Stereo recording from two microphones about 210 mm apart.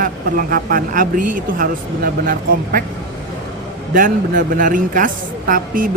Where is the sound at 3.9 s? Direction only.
40° right (ahead or behind).